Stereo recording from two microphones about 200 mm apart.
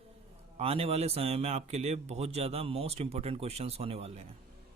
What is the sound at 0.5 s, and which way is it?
A man's voice, 30° right (ahead or behind).